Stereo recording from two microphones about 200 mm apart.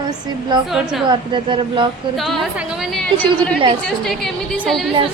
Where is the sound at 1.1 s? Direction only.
25° right (ahead or behind).